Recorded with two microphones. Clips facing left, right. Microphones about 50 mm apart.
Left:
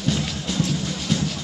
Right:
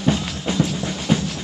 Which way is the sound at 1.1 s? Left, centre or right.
Right.